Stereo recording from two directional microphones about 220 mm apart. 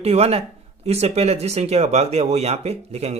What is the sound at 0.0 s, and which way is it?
Speech, 25° right (ahead or behind).